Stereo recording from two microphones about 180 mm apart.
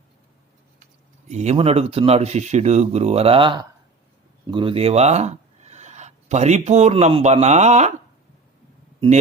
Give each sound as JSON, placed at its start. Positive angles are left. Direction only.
{"t": 1.3, "sound": "speech", "side_deg": -40}